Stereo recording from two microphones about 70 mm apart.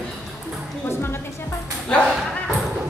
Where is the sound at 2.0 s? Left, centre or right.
Centre.